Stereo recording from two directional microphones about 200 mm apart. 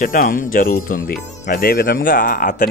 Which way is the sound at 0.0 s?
45° left (ahead or behind).